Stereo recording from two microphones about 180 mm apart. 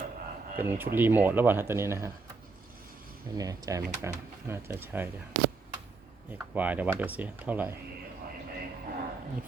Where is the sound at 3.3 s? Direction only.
20° right (ahead or behind).